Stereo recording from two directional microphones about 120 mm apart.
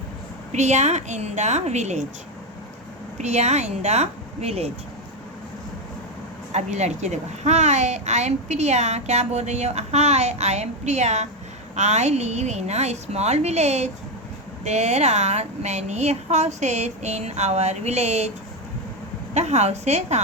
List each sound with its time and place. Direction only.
0.5 s a child's voice: 75° right (ahead or behind)
3.2 s a child's voice: 70° right (ahead or behind)
6.5 s a child's voice: 70° right (ahead or behind)
19.3 s a child's voice: 70° right (ahead or behind)